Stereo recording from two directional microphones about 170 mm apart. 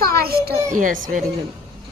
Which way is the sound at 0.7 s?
50° right (ahead or behind).